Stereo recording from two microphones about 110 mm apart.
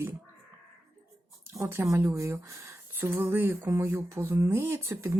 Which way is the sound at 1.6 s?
25° right (ahead or behind).